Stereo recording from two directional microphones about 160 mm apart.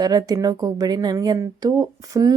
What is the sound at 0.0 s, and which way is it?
Speech, 25° right (ahead or behind).